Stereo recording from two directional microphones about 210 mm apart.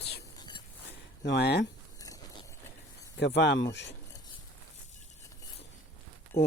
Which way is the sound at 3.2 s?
55° left (ahead or behind).